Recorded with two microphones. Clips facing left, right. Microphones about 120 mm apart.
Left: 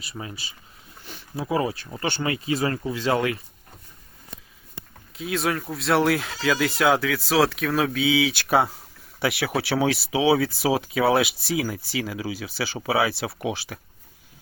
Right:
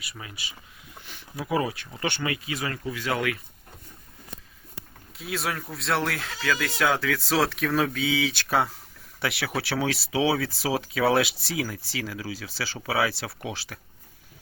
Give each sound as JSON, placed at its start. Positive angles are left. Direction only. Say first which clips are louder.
{"t": 0.0, "sound": "speech", "louder": "left 5 dB", "side_deg": 30}
{"t": 5.1, "sound": "speech", "louder": "left 5 dB", "side_deg": 0}